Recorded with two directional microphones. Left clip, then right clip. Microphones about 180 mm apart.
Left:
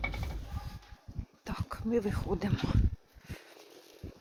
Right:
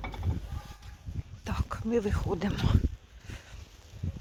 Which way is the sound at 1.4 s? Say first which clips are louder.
Right 3 dB; 5° right (ahead or behind).